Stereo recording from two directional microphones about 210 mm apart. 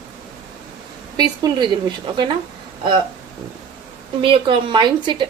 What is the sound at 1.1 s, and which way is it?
Speech, 20° right (ahead or behind).